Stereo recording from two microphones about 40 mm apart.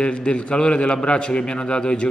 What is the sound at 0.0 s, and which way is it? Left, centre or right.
A man's voice, left.